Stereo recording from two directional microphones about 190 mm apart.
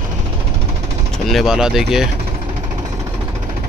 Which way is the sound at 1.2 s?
Centre (ahead or behind).